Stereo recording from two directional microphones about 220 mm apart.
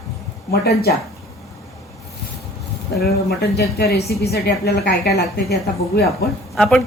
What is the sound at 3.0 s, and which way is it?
A woman's voice, 45° left (ahead or behind).